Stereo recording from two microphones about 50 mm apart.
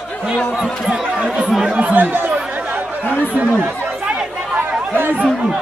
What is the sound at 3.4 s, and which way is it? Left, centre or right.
Speech, right.